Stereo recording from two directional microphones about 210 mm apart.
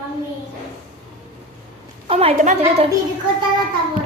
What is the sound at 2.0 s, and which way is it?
Speech, 30° right (ahead or behind).